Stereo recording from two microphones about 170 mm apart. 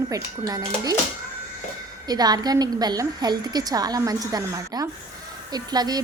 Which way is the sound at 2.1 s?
25° right (ahead or behind).